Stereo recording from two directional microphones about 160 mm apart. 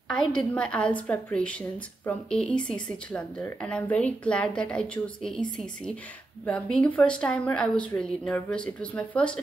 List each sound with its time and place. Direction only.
0.1 s a woman's voice: 5° left (ahead or behind)
6.4 s a woman's voice: 10° left (ahead or behind)